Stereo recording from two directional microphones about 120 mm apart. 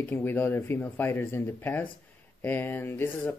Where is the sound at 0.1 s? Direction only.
15° left (ahead or behind).